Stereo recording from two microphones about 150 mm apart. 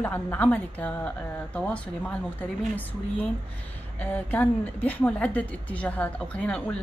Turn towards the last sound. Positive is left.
turn(degrees=10)  # may be behind; listen again after turning